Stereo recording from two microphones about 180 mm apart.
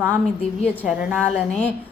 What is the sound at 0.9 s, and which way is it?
Speech, 5° right (ahead or behind).